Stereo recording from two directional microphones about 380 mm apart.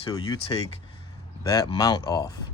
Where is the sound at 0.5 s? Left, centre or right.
Centre.